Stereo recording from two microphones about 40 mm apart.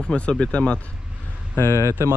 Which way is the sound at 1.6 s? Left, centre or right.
Left.